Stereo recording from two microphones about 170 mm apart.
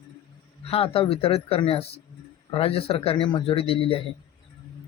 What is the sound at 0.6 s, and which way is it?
Speech, 35° left (ahead or behind).